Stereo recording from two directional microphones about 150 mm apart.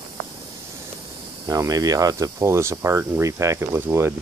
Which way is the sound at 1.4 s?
25° right (ahead or behind).